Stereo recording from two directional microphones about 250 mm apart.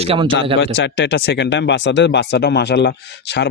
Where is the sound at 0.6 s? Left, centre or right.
Left.